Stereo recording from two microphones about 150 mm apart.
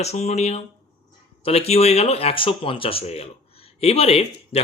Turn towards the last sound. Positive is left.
turn(degrees=45)  # may be behind; listen again after turning